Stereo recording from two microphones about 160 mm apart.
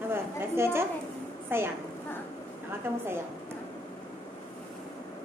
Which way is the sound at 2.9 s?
15° right (ahead or behind).